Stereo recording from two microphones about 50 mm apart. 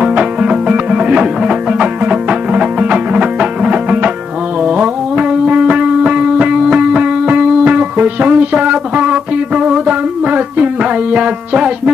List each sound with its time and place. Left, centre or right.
0.0 s music: right
10.2 s music: right